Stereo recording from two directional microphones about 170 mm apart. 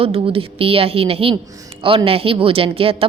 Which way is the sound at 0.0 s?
35° right (ahead or behind).